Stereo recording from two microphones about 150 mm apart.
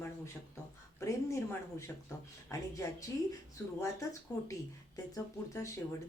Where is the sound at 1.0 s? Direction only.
20° left (ahead or behind).